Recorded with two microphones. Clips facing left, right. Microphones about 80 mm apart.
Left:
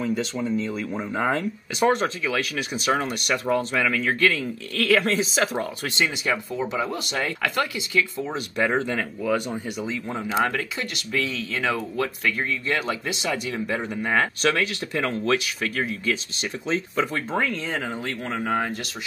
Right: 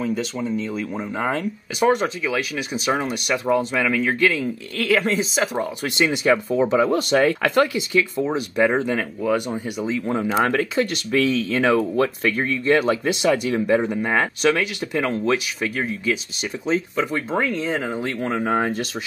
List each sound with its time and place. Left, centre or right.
0.0 s speech: centre
5.9 s speech: right
8.3 s speech: centre
10.4 s speech: right
13.7 s speech: centre